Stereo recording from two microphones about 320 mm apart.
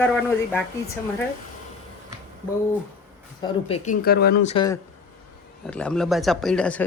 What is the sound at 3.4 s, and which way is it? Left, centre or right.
Speech, centre.